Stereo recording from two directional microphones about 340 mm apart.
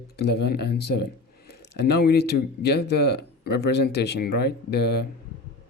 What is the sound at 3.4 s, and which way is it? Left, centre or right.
Speech, left.